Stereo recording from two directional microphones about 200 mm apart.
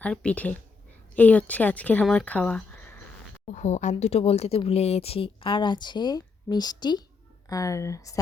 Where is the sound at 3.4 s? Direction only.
35° left (ahead or behind); by 8.1 s 15° left (ahead or behind).